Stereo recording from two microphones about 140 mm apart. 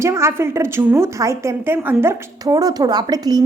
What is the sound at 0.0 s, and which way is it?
A woman's voice, 20° right (ahead or behind).